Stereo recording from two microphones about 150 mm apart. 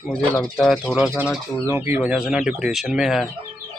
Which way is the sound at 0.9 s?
10° right (ahead or behind).